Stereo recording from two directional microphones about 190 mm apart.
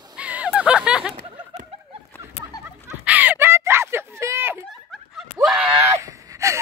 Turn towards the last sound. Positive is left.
turn(degrees=-15)  # may be behind; listen again after turning